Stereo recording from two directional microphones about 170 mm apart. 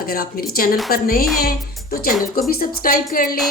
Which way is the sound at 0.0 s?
60° left (ahead or behind).